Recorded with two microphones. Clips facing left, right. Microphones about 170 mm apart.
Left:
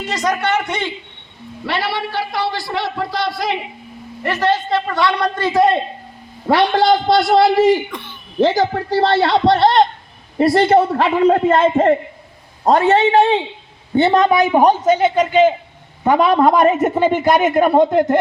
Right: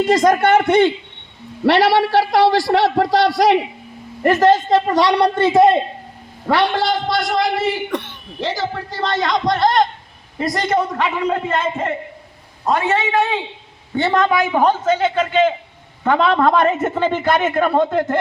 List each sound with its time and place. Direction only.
0.1 s a man's voice: 50° right (ahead or behind)
1.6 s a man's voice: 80° right
4.2 s a woman's voice: 45° right (ahead or behind); by 5.8 s 25° right (ahead or behind)
7.1 s a man's voice: 30° left (ahead or behind)
8.4 s a man's voice: 50° left (ahead or behind); by 18.2 s 15° left (ahead or behind)